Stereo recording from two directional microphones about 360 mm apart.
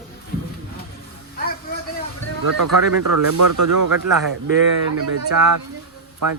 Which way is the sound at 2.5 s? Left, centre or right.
Right.